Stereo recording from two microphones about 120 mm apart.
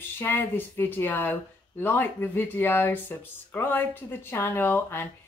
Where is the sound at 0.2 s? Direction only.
15° left (ahead or behind).